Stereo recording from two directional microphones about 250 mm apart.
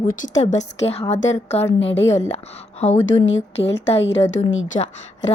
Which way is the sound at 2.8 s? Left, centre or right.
Left.